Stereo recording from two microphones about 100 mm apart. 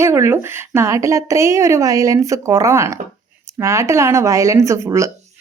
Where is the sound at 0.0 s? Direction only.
25° right (ahead or behind).